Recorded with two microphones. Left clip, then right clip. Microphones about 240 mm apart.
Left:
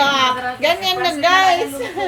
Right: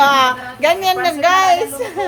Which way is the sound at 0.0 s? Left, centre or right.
Centre.